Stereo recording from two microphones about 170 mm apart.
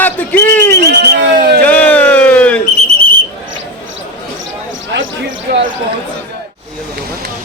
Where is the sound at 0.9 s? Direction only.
85° right.